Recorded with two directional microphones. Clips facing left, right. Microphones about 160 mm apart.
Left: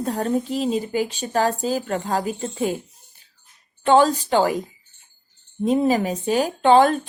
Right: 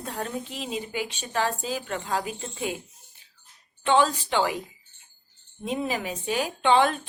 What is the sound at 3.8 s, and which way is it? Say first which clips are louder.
Speech: left 6 dB; 40° left (ahead or behind).